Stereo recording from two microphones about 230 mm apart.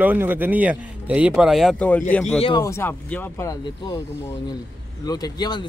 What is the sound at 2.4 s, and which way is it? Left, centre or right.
Speech, centre.